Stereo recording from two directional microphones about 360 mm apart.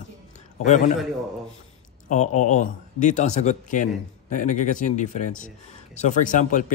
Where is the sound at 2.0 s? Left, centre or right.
Centre.